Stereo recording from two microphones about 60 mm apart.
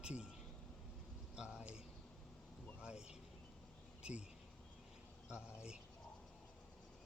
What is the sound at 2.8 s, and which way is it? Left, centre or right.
Vehicle, centre.